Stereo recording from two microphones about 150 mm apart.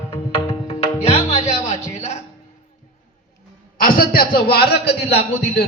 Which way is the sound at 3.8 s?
75° left (ahead or behind).